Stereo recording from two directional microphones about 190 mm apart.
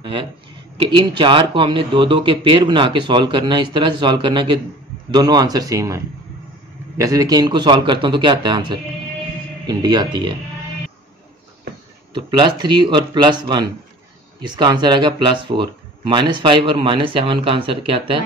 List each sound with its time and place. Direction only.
0.0 s speech: 25° right (ahead or behind)
12.1 s speech: 25° right (ahead or behind)